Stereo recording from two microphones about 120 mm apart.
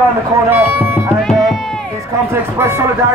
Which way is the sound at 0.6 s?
20° right (ahead or behind).